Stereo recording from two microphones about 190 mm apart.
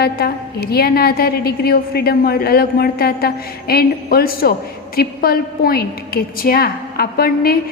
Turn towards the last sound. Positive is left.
turn(degrees=50)  # may be behind; listen again after turning